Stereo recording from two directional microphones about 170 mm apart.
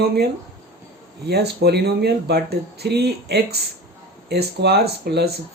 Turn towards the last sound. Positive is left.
turn(degrees=-70)  # may be behind; listen again after turning